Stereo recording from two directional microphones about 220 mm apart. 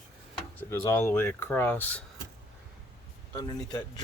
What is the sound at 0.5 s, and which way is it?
Speech, 10° left (ahead or behind).